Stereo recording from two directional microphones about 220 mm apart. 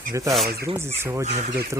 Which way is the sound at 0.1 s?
15° right (ahead or behind).